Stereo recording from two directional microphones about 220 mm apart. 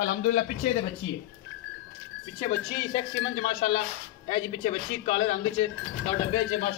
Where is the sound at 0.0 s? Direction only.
40° left (ahead or behind).